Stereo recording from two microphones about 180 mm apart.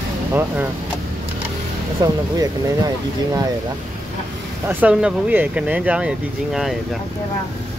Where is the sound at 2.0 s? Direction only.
20° right (ahead or behind).